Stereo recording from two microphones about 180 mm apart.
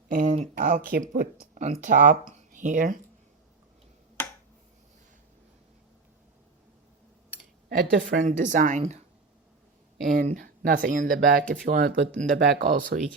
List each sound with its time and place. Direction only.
0.1 s speech: 45° right (ahead or behind)
2.3 s a sound: 45° right (ahead or behind)
7.7 s speech: 55° right (ahead or behind)
10.1 s speech: 50° right (ahead or behind)
12.4 s speech: 55° right (ahead or behind)